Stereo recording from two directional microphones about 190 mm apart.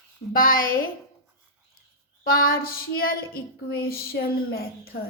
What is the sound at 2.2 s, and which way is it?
Child singing, 50° left (ahead or behind).